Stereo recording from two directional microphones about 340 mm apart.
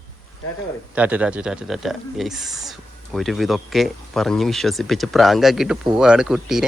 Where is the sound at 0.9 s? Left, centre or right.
Centre.